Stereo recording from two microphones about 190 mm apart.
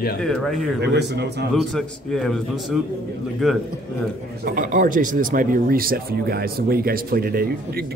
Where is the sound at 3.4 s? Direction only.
Centre (ahead or behind).